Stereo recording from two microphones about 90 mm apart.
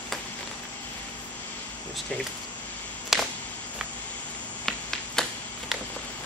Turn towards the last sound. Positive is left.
turn(degrees=5)  # may be behind; listen again after turning